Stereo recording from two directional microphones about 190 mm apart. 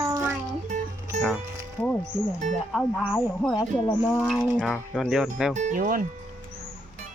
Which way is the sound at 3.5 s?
20° left (ahead or behind).